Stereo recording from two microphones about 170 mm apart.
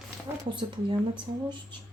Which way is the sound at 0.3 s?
10° right (ahead or behind).